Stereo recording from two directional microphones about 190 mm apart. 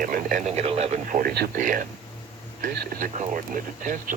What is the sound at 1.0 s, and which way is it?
Speech, 45° right (ahead or behind).